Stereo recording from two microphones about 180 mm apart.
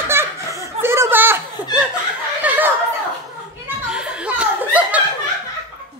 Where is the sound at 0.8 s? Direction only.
15° right (ahead or behind).